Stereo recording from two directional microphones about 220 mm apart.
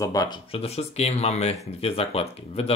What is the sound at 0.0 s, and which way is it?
Speech, 15° left (ahead or behind).